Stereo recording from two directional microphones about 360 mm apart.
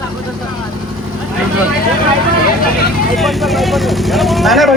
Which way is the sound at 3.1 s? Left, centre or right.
Centre.